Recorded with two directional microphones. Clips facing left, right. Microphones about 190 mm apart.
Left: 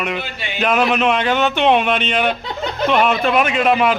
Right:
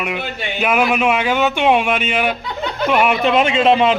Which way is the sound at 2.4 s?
35° left (ahead or behind).